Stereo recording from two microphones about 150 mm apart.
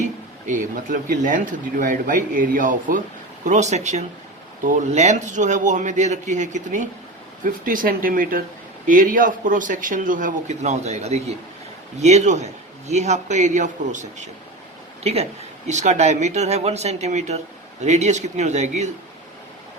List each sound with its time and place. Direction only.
0.0 s speech: 60° right (ahead or behind)
3.4 s speech: 50° right (ahead or behind)
7.4 s speech: 65° right (ahead or behind)
15.0 s speech: 45° right (ahead or behind)